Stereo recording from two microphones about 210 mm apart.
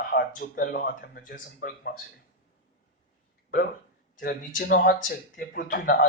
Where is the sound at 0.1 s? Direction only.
45° left (ahead or behind).